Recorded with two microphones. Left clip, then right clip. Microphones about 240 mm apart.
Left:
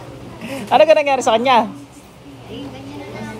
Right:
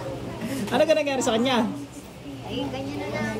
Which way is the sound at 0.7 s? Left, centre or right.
Left.